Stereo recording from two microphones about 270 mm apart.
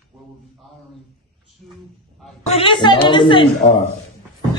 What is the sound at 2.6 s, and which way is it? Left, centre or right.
Speech, centre.